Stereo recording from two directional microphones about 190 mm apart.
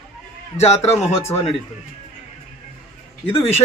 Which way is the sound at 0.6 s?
35° left (ahead or behind).